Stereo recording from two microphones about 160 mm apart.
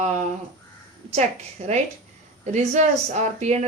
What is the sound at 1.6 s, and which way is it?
Speech, 45° right (ahead or behind).